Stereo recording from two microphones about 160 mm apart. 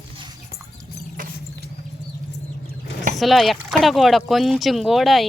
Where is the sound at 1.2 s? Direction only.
55° right (ahead or behind).